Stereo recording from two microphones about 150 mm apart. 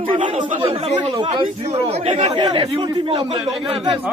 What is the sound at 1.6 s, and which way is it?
Speech, 45° right (ahead or behind).